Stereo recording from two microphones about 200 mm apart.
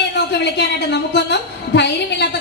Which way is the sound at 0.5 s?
60° left (ahead or behind).